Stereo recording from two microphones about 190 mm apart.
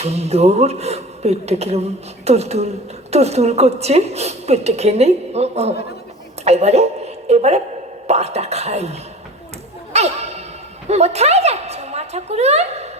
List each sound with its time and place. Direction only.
0.0 s a woman's voice: 35° right (ahead or behind)
9.9 s a sound: 35° right (ahead or behind)
10.8 s a woman's voice: 35° right (ahead or behind)